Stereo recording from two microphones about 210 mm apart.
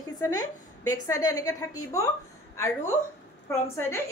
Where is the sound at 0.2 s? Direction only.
15° left (ahead or behind).